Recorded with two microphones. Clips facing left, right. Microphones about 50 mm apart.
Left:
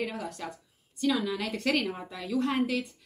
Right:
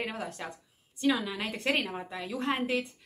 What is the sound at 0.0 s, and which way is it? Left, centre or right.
A woman's voice, right.